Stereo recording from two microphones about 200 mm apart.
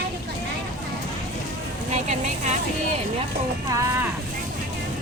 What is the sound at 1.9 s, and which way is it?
Speech, 35° right (ahead or behind).